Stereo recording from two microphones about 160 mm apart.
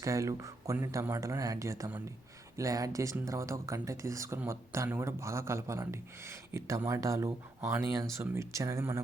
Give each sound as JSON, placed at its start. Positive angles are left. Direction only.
{"t": 0.0, "sound": "speech", "side_deg": -20}